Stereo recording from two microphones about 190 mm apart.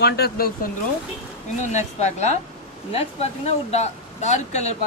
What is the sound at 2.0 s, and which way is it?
Speech, 35° left (ahead or behind).